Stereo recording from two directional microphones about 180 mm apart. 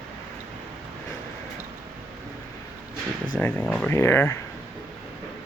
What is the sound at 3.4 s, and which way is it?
Speech, 10° left (ahead or behind).